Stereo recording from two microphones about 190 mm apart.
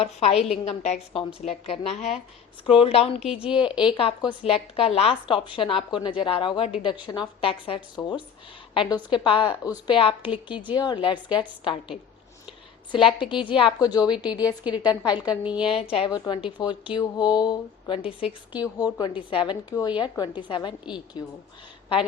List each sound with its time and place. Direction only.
0.0 s a woman's voice: 35° left (ahead or behind)
3.4 s a woman's voice: 5° right (ahead or behind)
3.8 s a woman's voice: 25° left (ahead or behind)